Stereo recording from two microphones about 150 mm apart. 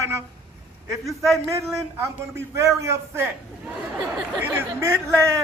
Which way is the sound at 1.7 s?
20° right (ahead or behind).